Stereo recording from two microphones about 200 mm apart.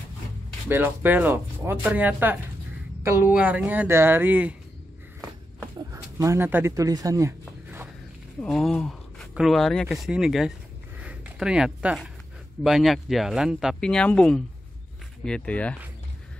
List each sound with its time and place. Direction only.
0.7 s speech: 10° right (ahead or behind)
5.8 s a sound: 15° right (ahead or behind)
8.4 s speech: centre (ahead or behind)